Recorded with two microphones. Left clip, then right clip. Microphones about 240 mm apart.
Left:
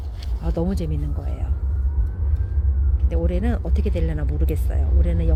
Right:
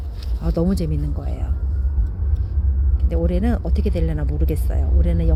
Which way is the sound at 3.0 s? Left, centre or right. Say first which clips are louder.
Right 3 dB; centre.